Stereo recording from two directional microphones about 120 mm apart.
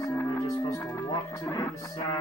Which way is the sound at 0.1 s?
20° left (ahead or behind).